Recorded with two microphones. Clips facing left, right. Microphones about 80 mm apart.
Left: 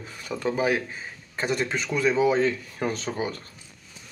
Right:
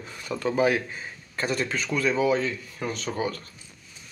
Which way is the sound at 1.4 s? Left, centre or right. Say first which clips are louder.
Left 1 dB; centre.